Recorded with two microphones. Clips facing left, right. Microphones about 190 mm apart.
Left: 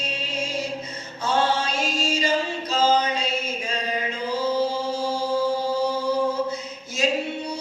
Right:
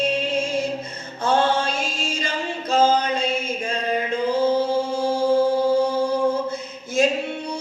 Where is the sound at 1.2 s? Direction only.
55° right (ahead or behind).